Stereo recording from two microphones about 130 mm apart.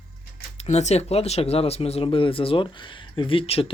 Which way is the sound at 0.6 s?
60° left (ahead or behind).